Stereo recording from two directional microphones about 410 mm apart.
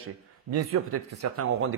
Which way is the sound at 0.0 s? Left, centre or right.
Right.